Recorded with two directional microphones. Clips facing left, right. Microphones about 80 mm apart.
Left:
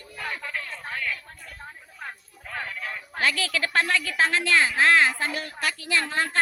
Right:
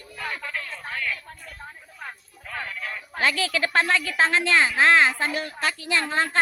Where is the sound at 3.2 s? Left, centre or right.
Right.